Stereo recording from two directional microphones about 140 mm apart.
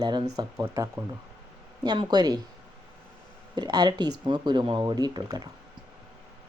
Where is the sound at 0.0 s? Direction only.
35° right (ahead or behind).